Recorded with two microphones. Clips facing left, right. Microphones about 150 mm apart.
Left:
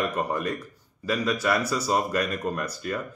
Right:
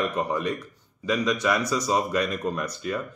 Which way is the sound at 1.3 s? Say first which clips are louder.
Even; 5° left (ahead or behind).